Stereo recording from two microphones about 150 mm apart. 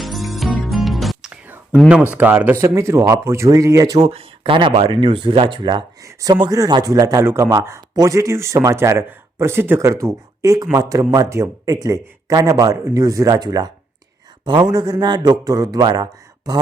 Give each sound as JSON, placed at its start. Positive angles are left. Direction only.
{"t": 0.0, "sound": "music", "side_deg": 0}
{"t": 1.9, "sound": "speech", "side_deg": -10}
{"t": 4.0, "sound": "speech", "side_deg": -40}